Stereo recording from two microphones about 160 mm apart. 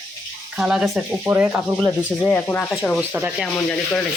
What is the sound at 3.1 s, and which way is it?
Speech, 5° right (ahead or behind).